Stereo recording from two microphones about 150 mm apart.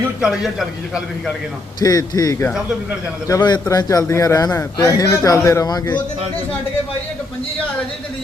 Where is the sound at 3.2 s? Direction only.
25° left (ahead or behind).